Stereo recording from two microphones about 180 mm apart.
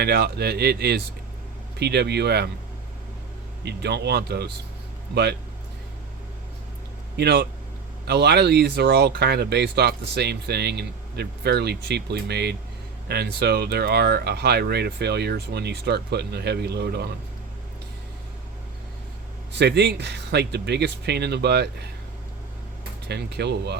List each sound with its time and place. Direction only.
0.0 s speech: 65° right (ahead or behind)
3.6 s speech: 70° right (ahead or behind)
7.2 s speech: 65° right (ahead or behind)
19.5 s speech: 70° right (ahead or behind)
23.0 s speech: 65° right (ahead or behind)